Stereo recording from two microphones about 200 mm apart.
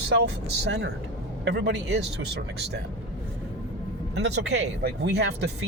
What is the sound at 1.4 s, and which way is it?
Speech, 60° right (ahead or behind).